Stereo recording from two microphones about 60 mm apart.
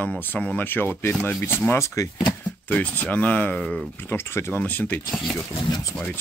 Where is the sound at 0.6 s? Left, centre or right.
Left.